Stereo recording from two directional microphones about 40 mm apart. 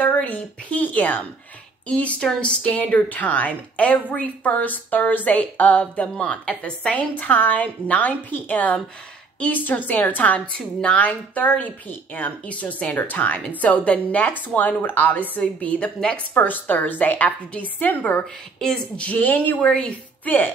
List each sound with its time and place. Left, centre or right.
0.0 s a woman's voice: left
10.4 s a woman's voice: left
11.0 s a woman's voice: left
12.9 s a woman's voice: left
15.4 s a woman's voice: left
16.3 s a woman's voice: left
18.9 s a woman's voice: left
20.2 s a woman's voice: left